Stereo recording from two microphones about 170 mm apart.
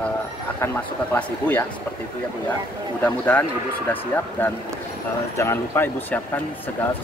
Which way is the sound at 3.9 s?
10° left (ahead or behind).